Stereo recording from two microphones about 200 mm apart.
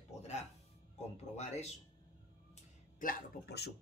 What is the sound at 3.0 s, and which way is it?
Speech, 50° left (ahead or behind).